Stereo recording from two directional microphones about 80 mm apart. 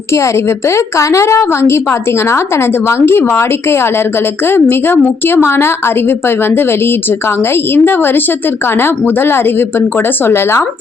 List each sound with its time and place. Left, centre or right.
0.1 s a woman's voice: left